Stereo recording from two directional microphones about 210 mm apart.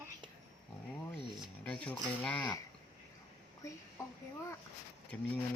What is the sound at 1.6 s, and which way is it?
Speech, 5° left (ahead or behind).